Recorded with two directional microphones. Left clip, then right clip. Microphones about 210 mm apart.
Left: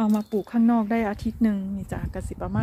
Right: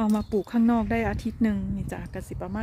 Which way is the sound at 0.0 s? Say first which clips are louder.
Left 1 dB; 20° right (ahead or behind).